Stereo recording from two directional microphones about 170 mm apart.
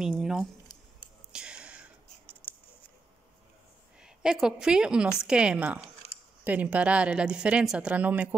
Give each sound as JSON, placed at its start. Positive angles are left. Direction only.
{"t": 0.0, "sound": "a woman's voice", "side_deg": 0}
{"t": 1.3, "sound": "whispering", "side_deg": -5}
{"t": 2.4, "sound": "a sound", "side_deg": 10}
{"t": 4.0, "sound": "a woman's voice", "side_deg": -5}
{"t": 6.0, "sound": "a sound", "side_deg": 40}
{"t": 6.4, "sound": "a woman's voice", "side_deg": -10}